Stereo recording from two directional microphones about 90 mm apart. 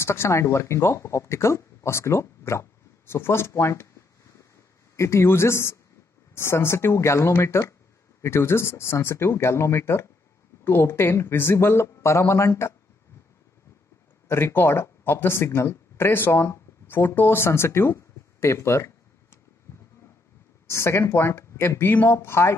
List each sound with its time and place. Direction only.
0.0 s a woman's voice: 30° left (ahead or behind)
4.9 s a woman's voice: 30° left (ahead or behind)
14.2 s speech: 25° left (ahead or behind)
19.7 s a sound: 25° left (ahead or behind)
20.6 s a woman's voice: 30° left (ahead or behind)